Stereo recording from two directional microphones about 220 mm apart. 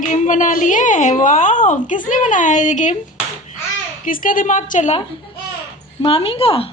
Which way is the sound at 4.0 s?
40° left (ahead or behind).